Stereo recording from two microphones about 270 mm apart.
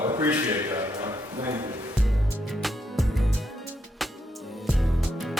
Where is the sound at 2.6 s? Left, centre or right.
Centre.